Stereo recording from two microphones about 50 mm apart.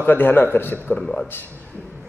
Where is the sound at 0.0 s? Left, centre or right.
Left.